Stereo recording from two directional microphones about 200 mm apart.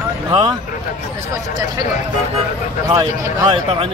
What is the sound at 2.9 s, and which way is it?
Speech, 25° right (ahead or behind).